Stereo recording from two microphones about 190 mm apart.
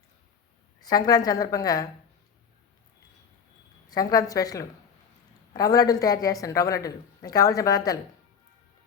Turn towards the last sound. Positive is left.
turn(degrees=20)  # may be behind; listen again after turning